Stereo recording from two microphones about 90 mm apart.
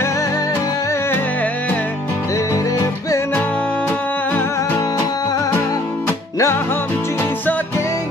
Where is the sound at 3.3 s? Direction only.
20° left (ahead or behind).